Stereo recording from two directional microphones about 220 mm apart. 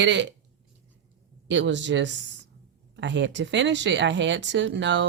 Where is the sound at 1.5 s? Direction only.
55° right (ahead or behind).